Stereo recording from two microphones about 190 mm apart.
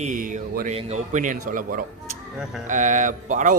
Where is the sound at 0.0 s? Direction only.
45° right (ahead or behind).